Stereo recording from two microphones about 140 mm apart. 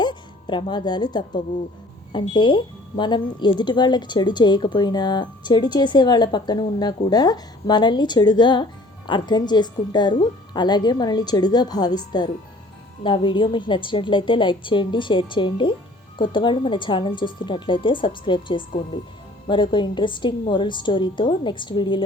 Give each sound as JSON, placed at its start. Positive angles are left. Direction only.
{"t": 0.0, "sound": "a woman's voice", "side_deg": 35}